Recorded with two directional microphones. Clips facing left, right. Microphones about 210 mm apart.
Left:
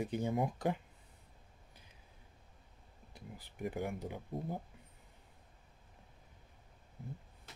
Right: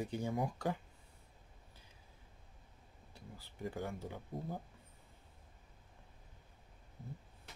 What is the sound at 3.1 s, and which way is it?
Speech, 15° left (ahead or behind).